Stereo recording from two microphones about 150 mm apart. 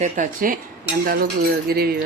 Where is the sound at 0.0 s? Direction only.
60° right (ahead or behind).